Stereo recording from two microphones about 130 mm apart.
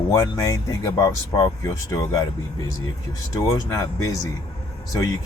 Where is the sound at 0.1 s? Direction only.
25° left (ahead or behind).